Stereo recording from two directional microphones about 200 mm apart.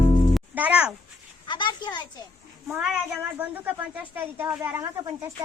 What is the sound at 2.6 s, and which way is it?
A woman's voice, 5° right (ahead or behind).